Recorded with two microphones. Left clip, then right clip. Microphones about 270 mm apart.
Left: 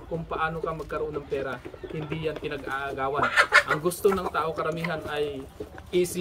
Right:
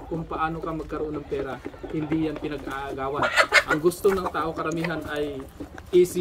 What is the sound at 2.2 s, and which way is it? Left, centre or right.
Speech, centre.